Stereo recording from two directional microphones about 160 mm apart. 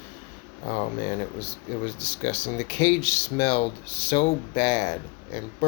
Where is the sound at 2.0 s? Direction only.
40° left (ahead or behind).